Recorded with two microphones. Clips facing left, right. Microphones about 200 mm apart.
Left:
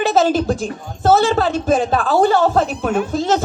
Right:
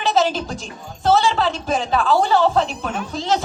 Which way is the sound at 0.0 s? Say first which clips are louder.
Left 4 dB; 50° left (ahead or behind).